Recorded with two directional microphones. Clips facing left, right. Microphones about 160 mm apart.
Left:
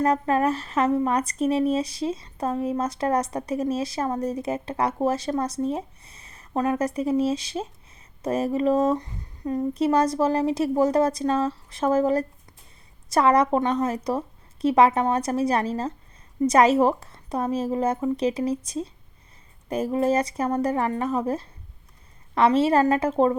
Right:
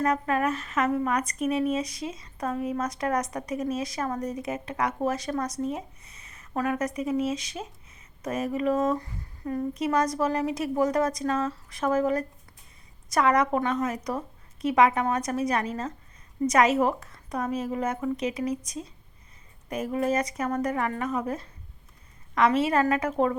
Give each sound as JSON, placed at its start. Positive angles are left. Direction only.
{"t": 0.0, "sound": "a woman's voice", "side_deg": 30}